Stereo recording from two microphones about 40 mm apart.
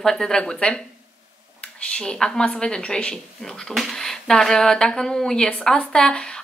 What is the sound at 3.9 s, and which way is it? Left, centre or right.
A woman's voice, centre.